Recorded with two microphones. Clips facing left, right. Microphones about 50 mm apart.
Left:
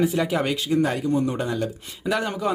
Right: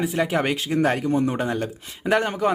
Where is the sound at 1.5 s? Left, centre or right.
Right.